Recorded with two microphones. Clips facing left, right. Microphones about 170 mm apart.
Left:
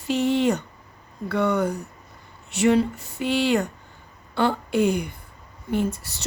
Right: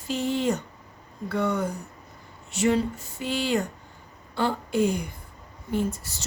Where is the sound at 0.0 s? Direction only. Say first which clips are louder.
Left 5 dB; 70° left (ahead or behind).